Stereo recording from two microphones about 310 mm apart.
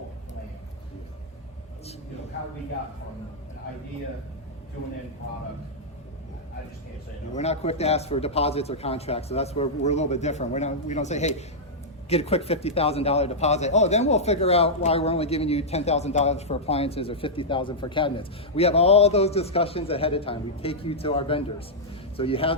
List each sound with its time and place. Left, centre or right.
7.3 s a man's voice: centre